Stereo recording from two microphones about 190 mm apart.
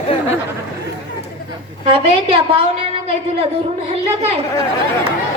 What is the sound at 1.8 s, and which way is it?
Speech, 30° right (ahead or behind).